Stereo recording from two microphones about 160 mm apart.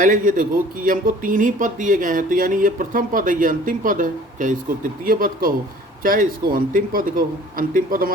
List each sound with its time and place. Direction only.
0.0 s speech: 60° right (ahead or behind)